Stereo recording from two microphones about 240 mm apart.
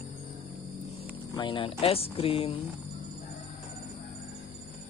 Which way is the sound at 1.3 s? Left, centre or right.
Centre.